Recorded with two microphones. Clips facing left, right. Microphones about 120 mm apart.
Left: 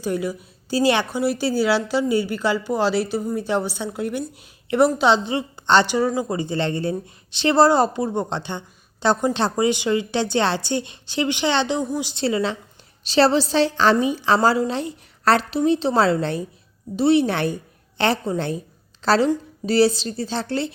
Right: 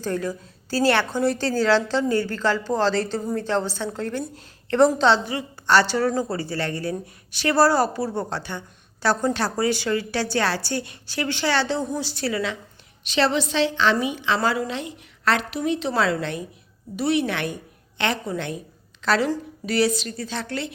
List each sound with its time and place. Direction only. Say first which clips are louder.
0.0 s a woman's voice: left 2 dB; 10° left (ahead or behind); by 20.7 s 30° left (ahead or behind)